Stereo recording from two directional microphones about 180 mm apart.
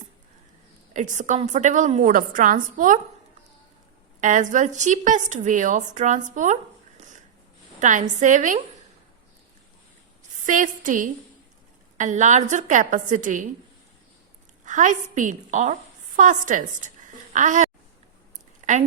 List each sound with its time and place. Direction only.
0.9 s a woman's voice: 45° right (ahead or behind)
4.2 s a woman's voice: 45° right (ahead or behind)
10.4 s a woman's voice: 45° right (ahead or behind)
14.6 s a woman's voice: 45° right (ahead or behind)
18.6 s a sound: 40° right (ahead or behind)